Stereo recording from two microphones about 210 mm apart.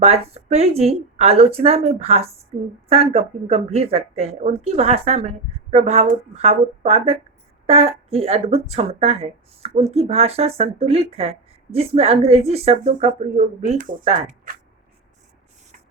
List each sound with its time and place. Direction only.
0.3 s speech: 30° right (ahead or behind)